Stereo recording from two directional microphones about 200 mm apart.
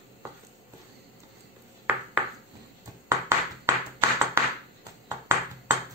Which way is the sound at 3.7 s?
15° right (ahead or behind).